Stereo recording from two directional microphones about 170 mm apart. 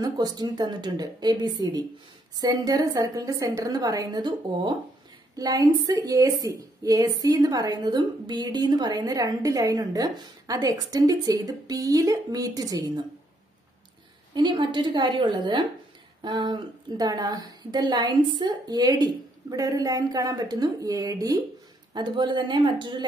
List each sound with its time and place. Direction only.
0.0 s a woman's voice: 25° right (ahead or behind)
14.3 s a woman's voice: 25° right (ahead or behind)